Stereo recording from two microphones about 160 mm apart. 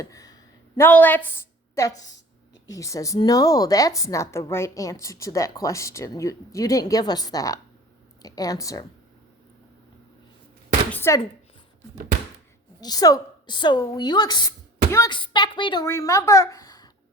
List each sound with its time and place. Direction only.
0.0 s a woman's voice: 20° left (ahead or behind)
0.8 s a woman's voice: 10° left (ahead or behind)
10.9 s a sound: 15° left (ahead or behind)
12.8 s a woman's voice: 25° left (ahead or behind)
15.9 s a woman's voice: 20° left (ahead or behind)